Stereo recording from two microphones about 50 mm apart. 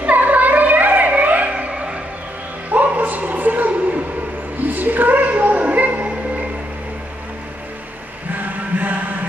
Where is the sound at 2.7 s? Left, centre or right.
Right.